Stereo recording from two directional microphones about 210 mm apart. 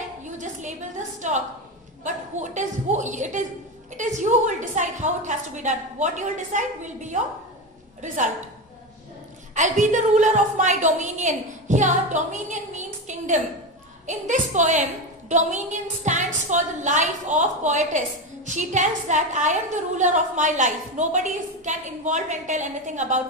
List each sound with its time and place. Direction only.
0.2 s a sound: 35° right (ahead or behind)
2.0 s a woman's voice: 35° right (ahead or behind)
9.6 s a woman's voice: 35° right (ahead or behind)